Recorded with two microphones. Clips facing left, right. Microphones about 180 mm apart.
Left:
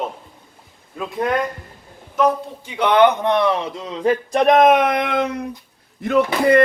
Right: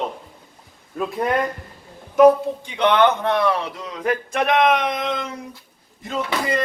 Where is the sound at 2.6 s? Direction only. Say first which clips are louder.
Left 3 dB; 10° left (ahead or behind).